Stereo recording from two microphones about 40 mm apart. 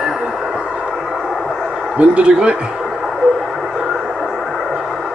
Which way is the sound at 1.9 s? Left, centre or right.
Right.